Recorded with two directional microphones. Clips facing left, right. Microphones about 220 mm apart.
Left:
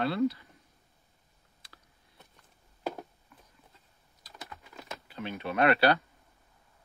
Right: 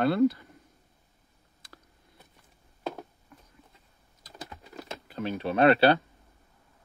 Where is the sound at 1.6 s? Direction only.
45° right (ahead or behind).